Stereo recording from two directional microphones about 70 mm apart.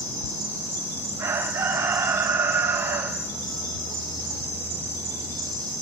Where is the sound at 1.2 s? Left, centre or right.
Right.